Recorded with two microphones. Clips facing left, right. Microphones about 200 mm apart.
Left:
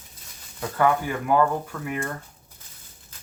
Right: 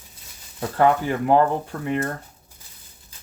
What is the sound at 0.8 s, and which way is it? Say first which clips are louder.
Speech: right 3 dB; 30° right (ahead or behind).